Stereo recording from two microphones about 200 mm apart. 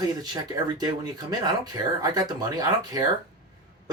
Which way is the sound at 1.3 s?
20° right (ahead or behind).